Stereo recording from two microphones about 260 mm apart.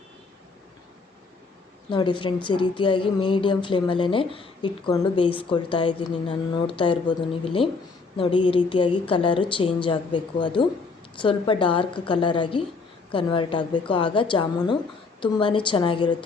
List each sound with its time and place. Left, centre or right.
1.9 s a woman's voice: centre